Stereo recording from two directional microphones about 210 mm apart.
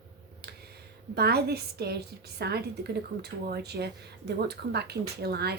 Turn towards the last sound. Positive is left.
turn(degrees=-50)  # may be behind; listen again after turning